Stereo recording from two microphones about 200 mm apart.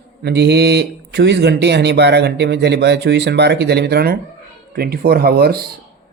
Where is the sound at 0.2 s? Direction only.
55° right (ahead or behind).